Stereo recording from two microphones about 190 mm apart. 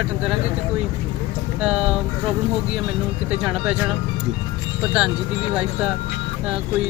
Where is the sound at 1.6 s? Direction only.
5° right (ahead or behind).